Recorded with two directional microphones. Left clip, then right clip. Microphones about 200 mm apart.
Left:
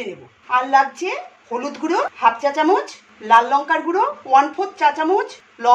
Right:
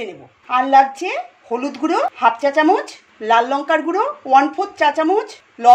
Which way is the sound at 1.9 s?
45° right (ahead or behind).